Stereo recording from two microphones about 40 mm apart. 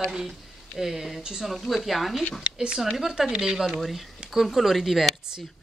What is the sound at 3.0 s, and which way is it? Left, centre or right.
Speech, centre.